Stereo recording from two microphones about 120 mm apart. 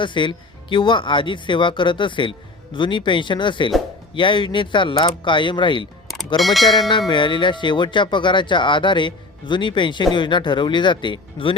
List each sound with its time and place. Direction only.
0.0 s speech: 40° left (ahead or behind)
6.1 s speech: centre (ahead or behind)
7.1 s speech: 40° left (ahead or behind)